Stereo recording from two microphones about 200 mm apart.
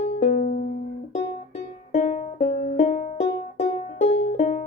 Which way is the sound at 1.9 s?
35° left (ahead or behind).